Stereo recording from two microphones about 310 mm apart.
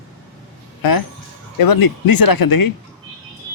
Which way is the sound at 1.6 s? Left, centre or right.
Left.